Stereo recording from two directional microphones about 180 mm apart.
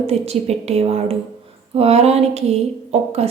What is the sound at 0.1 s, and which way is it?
A woman's voice, 35° right (ahead or behind).